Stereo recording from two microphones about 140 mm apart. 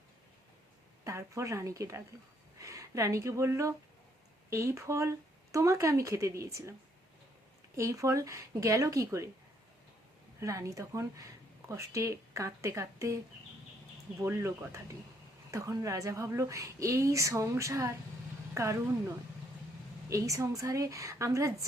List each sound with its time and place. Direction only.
1.0 s a woman's voice: 20° right (ahead or behind)
7.8 s a woman's voice: 20° right (ahead or behind)
10.4 s a woman's voice: 20° right (ahead or behind)
14.2 s a woman's voice: 20° right (ahead or behind)
20.1 s a woman's voice: 25° right (ahead or behind)